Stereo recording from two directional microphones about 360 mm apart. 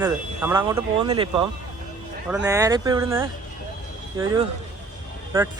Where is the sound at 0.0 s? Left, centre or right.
Centre.